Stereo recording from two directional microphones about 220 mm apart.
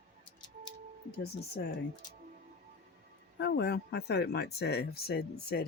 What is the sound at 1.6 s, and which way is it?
Speech, 45° left (ahead or behind).